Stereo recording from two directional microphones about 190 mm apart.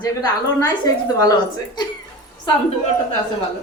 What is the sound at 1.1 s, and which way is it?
Speech, 20° left (ahead or behind).